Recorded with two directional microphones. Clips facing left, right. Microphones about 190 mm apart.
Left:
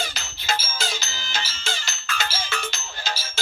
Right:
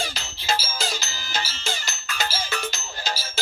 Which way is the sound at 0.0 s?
30° right (ahead or behind).